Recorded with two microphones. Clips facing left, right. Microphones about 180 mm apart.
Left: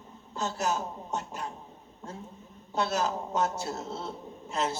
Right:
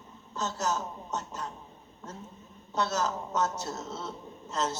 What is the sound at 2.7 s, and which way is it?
Speech, 10° left (ahead or behind).